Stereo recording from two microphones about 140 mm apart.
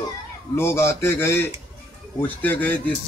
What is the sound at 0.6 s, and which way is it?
A man's voice, 20° left (ahead or behind).